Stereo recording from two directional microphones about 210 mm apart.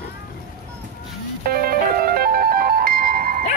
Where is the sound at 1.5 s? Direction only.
45° right (ahead or behind).